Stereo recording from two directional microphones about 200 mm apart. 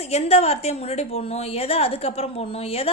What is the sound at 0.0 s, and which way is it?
A woman's voice, 30° left (ahead or behind).